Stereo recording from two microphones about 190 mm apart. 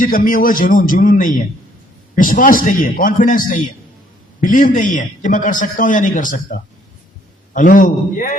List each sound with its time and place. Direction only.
0.0 s a man's voice: 45° left (ahead or behind)